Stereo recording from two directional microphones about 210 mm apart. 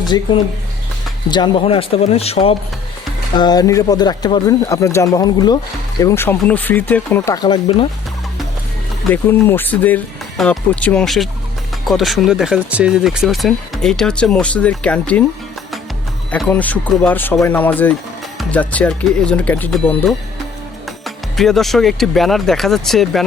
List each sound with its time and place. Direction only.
0.0 s speech: 20° left (ahead or behind)
7.4 s speech: 25° left (ahead or behind)
9.0 s speech: 10° left (ahead or behind)
16.3 s speech: 5° left (ahead or behind)